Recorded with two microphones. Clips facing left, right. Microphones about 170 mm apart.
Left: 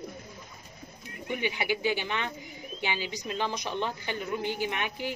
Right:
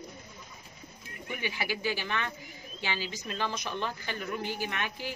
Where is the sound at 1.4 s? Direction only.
20° left (ahead or behind).